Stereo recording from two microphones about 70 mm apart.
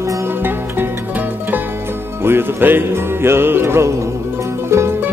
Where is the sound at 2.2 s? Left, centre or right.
Right.